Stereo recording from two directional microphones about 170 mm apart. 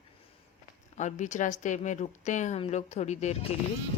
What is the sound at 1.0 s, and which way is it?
A woman's voice, 45° left (ahead or behind).